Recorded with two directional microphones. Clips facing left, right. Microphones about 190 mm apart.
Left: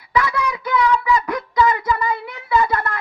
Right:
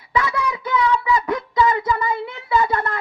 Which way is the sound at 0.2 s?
25° right (ahead or behind).